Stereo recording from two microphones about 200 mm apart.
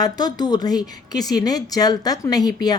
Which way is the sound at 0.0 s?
20° left (ahead or behind).